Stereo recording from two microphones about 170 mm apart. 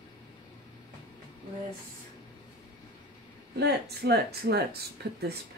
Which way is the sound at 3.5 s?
75° right (ahead or behind).